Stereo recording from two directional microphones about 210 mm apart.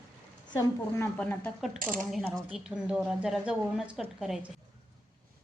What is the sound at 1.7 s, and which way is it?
Speech, 40° right (ahead or behind).